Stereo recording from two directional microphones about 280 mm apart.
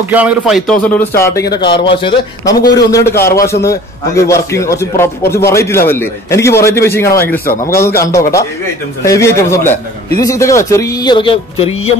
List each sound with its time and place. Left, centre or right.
0.1 s speech: centre; by 11.9 s left